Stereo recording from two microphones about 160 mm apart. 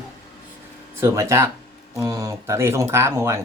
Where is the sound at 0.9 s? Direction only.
15° right (ahead or behind).